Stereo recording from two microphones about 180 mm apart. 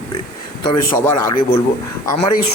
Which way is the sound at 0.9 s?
15° left (ahead or behind).